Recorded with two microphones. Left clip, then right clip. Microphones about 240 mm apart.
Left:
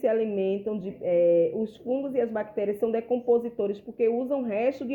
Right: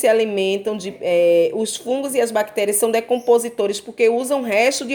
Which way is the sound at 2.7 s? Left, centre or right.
Right.